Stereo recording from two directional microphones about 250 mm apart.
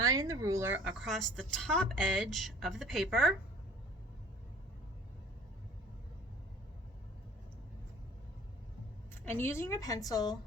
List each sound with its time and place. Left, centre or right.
0.1 s speech: centre
9.2 s a woman's voice: centre